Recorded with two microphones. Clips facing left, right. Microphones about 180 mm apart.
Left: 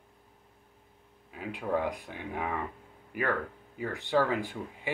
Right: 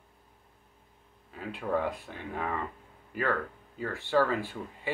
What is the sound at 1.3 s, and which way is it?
Speech, 10° left (ahead or behind).